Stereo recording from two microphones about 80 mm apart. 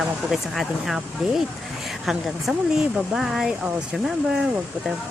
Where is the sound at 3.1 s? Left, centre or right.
Centre.